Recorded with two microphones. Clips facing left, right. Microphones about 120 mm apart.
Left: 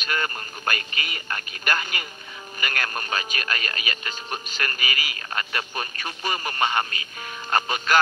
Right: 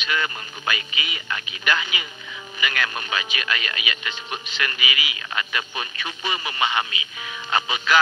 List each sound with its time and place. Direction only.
0.0 s speech: 45° left (ahead or behind)